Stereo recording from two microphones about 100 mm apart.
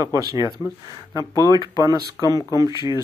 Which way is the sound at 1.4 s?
45° right (ahead or behind).